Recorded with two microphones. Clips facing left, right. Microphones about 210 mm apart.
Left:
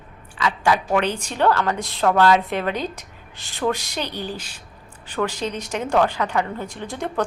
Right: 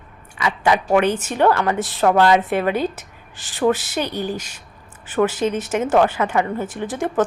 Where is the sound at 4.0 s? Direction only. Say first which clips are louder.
Right 5 dB; 10° right (ahead or behind).